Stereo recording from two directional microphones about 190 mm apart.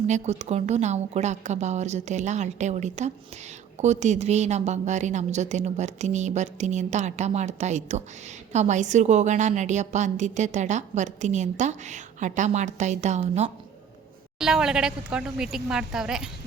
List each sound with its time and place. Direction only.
0.1 s a woman's voice: 35° right (ahead or behind)
14.3 s speech: 5° right (ahead or behind)